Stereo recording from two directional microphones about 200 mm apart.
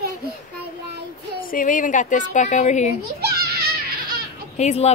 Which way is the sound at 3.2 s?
50° right (ahead or behind).